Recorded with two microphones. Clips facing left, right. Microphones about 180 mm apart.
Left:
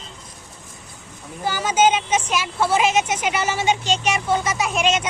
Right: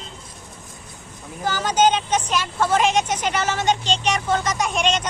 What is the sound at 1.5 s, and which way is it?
A woman's voice, 10° left (ahead or behind).